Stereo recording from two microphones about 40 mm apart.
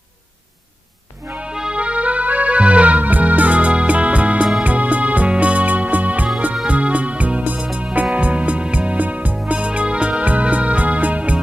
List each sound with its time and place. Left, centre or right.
1.5 s music: centre
1.7 s music: right